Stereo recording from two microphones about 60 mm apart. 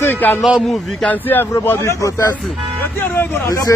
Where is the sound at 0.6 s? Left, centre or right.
Centre.